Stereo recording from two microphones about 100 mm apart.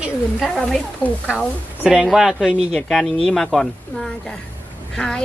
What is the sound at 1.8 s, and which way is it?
A woman's voice, 5° right (ahead or behind).